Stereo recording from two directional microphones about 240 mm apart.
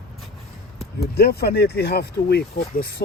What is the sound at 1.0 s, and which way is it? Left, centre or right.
Speech, left.